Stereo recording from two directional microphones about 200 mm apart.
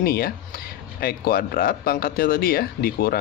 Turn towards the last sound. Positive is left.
turn(degrees=50)  # may be behind; listen again after turning